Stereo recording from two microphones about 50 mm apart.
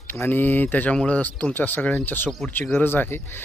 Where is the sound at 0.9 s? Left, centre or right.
Left.